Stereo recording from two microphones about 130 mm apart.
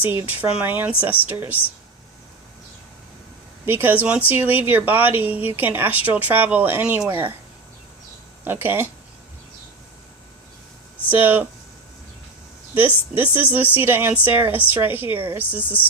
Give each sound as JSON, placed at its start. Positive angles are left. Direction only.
{"t": 0.0, "sound": "speech", "side_deg": -15}
{"t": 3.7, "sound": "speech", "side_deg": -15}
{"t": 8.4, "sound": "speech", "side_deg": -15}
{"t": 11.1, "sound": "speech", "side_deg": -15}
{"t": 13.1, "sound": "speech", "side_deg": -15}